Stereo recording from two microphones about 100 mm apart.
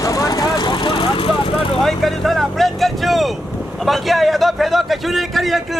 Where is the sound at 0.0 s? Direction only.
35° left (ahead or behind); by 1.8 s 65° left (ahead or behind).